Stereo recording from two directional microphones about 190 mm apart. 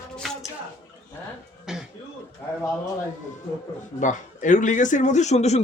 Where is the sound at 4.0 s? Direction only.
40° left (ahead or behind).